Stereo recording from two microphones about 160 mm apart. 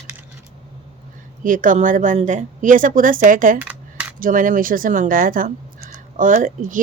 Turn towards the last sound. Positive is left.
turn(degrees=-55)  # may be behind; listen again after turning